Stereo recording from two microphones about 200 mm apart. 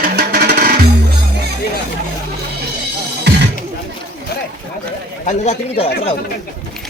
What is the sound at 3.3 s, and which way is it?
Music, 60° right (ahead or behind).